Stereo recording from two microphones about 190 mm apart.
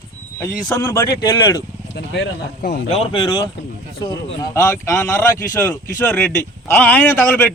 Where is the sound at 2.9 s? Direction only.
30° left (ahead or behind).